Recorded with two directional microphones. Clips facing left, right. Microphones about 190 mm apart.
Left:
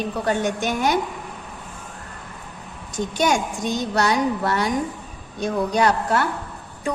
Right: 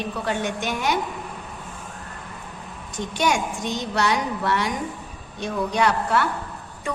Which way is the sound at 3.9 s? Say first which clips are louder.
Left 3 dB; 40° left (ahead or behind).